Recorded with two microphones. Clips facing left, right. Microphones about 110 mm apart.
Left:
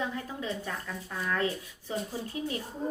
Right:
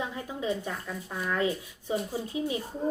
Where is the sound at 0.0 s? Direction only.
15° right (ahead or behind).